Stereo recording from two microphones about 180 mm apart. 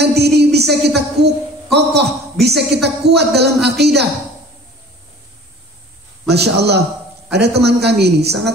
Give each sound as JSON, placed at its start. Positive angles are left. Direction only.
{"t": 0.0, "sound": "a sound", "side_deg": -65}
{"t": 2.4, "sound": "a woman's voice", "side_deg": -65}
{"t": 6.2, "sound": "a woman's voice", "side_deg": -65}